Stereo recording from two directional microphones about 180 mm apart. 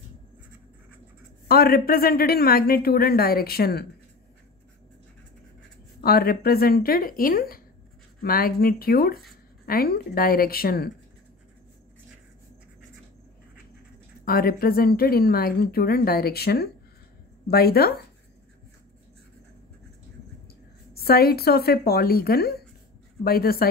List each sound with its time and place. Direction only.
1.5 s speech: 55° left (ahead or behind)
5.9 s speech: 60° left (ahead or behind)
14.2 s speech: 55° left (ahead or behind)
20.9 s speech: 60° left (ahead or behind)